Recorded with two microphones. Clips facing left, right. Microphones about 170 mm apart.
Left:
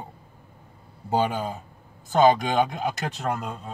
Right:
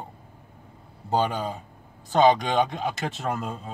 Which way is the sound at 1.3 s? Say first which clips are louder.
Even; 5° left (ahead or behind).